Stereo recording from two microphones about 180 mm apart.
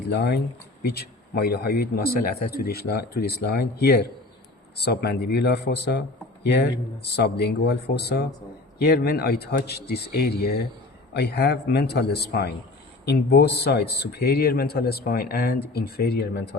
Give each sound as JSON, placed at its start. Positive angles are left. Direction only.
{"t": 0.1, "sound": "speech", "side_deg": 65}